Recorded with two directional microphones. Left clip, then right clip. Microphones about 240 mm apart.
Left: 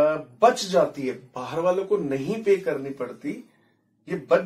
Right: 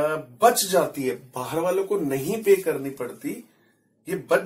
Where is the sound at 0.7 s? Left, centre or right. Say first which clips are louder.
Left 1 dB; right.